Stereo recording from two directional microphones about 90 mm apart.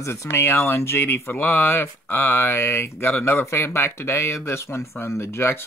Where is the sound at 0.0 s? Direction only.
30° left (ahead or behind).